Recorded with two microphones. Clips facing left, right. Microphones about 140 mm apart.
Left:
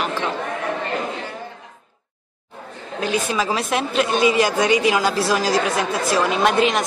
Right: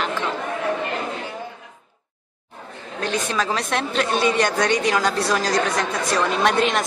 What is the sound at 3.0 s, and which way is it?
A woman's voice, 5° left (ahead or behind).